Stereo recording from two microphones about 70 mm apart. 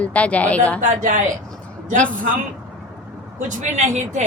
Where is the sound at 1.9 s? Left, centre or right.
Centre.